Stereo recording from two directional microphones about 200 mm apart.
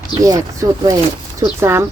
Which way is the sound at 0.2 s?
15° right (ahead or behind).